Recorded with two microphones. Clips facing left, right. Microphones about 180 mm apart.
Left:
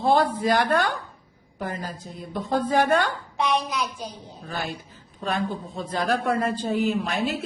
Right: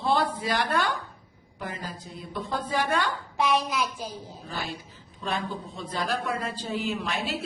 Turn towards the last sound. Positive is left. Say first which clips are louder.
# left 5 dB
turn(degrees=40)  # may be behind; listen again after turning